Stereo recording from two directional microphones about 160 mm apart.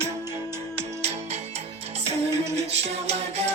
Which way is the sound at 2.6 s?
40° right (ahead or behind).